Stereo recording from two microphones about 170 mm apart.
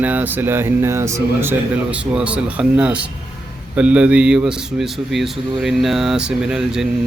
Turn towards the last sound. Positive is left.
turn(degrees=-5)  # may be behind; listen again after turning